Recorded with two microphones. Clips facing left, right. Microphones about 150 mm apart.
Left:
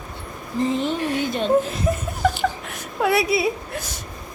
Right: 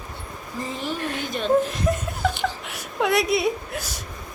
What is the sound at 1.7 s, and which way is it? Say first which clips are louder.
A woman's voice: left 1 dB; 5° left (ahead or behind).